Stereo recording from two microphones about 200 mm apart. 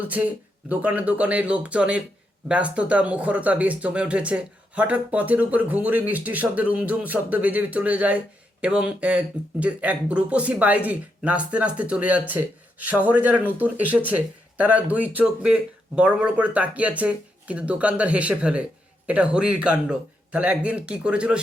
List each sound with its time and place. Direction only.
0.7 s speech: 5° right (ahead or behind)